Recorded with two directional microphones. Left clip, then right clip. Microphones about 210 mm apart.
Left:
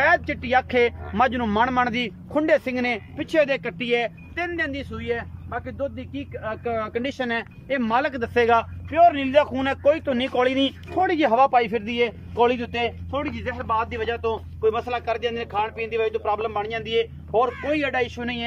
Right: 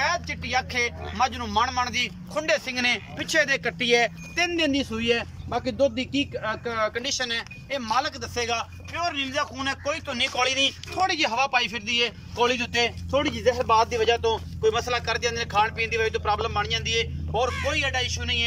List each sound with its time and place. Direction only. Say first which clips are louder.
0.0 s a man's voice: left 6 dB; 45° left (ahead or behind); by 5.2 s 5° right (ahead or behind)
5.5 s speech: right 6 dB; 15° right (ahead or behind)
6.4 s speech: left 4 dB; 15° left (ahead or behind)
13.1 s speech: right 5 dB; centre (ahead or behind); by 17.0 s 35° left (ahead or behind)
17.6 s speech: left 2 dB; 45° left (ahead or behind)